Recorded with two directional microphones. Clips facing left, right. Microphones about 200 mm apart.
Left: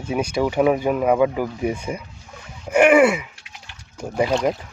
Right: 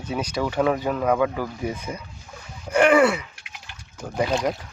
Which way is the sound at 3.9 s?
10° left (ahead or behind).